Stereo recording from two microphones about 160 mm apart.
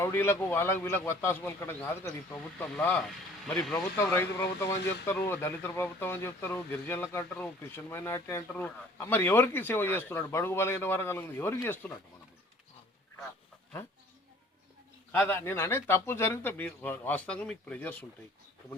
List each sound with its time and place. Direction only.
0.0 s speech: 15° left (ahead or behind)
3.8 s speech: 15° left (ahead or behind)
15.3 s speech: 15° left (ahead or behind)